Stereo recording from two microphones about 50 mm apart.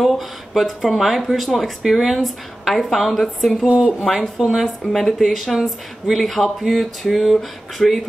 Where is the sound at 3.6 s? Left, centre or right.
Centre.